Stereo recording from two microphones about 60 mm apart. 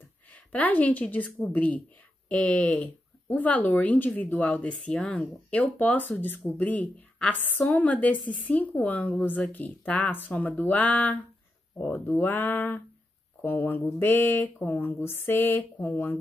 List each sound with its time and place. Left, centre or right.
0.3 s a woman's voice: left
15.0 s speech: left